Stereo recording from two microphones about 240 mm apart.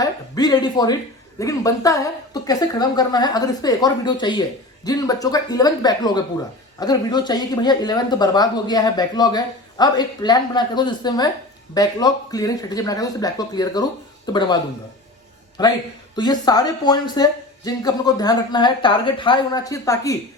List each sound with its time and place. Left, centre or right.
0.0 s speech: centre